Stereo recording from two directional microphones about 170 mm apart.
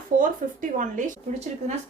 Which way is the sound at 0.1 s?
50° right (ahead or behind).